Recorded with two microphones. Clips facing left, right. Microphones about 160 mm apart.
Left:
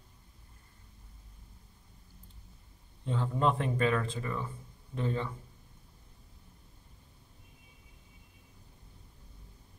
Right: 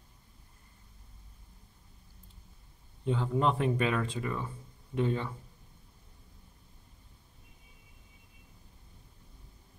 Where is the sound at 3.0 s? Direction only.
15° right (ahead or behind).